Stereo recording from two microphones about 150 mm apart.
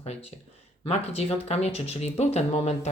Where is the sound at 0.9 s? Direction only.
45° left (ahead or behind).